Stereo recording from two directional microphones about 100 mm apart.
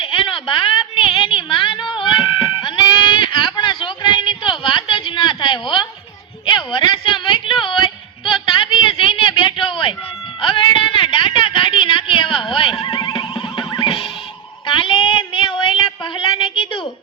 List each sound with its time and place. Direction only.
0.0 s a sound: 60° left (ahead or behind)
2.6 s sheep: 45° left (ahead or behind)
6.4 s a sound: 50° left (ahead or behind)
12.8 s neigh: 45° left (ahead or behind)
13.7 s music: 55° left (ahead or behind)
14.7 s child singing: 55° left (ahead or behind)